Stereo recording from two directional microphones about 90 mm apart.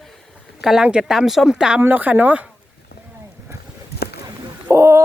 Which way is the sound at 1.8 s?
20° right (ahead or behind).